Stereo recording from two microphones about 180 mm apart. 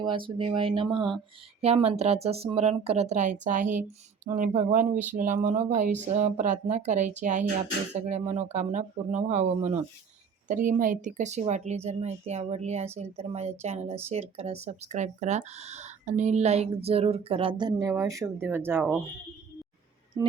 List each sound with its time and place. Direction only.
0.0 s speech: 25° right (ahead or behind)
20.1 s music: 20° right (ahead or behind)